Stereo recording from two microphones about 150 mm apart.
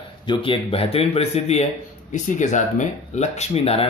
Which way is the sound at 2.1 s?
55° left (ahead or behind).